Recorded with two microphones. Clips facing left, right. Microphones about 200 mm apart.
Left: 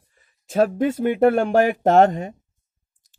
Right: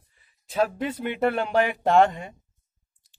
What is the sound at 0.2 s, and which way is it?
Speech, 50° left (ahead or behind).